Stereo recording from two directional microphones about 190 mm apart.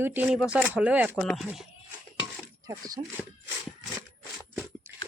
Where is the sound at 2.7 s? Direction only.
20° right (ahead or behind).